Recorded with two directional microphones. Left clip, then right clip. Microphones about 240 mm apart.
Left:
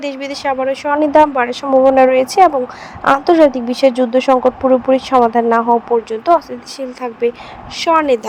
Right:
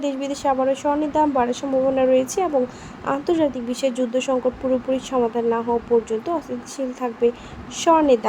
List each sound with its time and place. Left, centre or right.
0.0 s a woman's voice: centre